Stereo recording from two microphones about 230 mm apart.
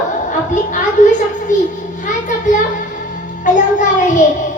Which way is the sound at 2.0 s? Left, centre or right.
Left.